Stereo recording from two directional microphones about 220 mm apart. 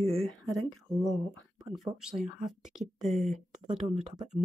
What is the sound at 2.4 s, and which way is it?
Speech, centre (ahead or behind).